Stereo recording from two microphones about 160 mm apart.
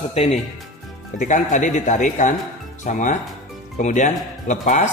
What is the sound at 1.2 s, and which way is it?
Speech, 50° left (ahead or behind).